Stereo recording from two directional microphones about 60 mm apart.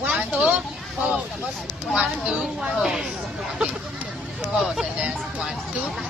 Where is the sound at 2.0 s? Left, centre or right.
Right.